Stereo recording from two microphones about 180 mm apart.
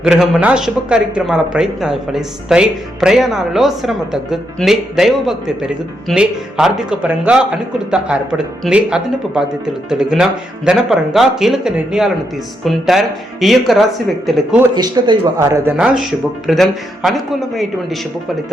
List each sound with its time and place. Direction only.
0.0 s speech: 5° right (ahead or behind)
14.8 s speech: 25° right (ahead or behind)
15.8 s speech: centre (ahead or behind)